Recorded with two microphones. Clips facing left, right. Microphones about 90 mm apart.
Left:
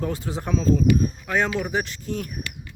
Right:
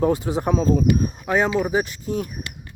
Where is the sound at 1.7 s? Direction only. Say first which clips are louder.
Right 4 dB; 10° right (ahead or behind).